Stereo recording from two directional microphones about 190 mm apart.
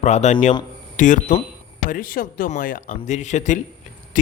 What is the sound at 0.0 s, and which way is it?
A man's voice, 35° left (ahead or behind).